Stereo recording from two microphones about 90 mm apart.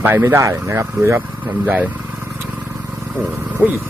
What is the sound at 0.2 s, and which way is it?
Speech, 35° right (ahead or behind).